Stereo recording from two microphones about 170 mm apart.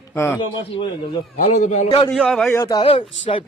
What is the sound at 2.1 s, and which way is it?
Speech, centre (ahead or behind).